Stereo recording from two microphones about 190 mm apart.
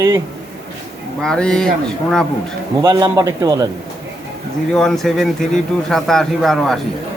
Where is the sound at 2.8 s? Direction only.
20° right (ahead or behind).